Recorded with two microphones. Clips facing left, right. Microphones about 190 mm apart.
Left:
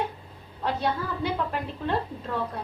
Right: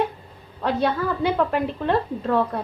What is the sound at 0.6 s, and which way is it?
A woman's voice, 75° right (ahead or behind).